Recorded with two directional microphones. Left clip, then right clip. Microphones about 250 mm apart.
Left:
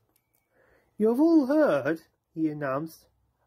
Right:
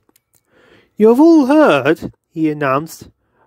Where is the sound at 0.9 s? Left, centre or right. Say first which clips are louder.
Right 13 dB; right.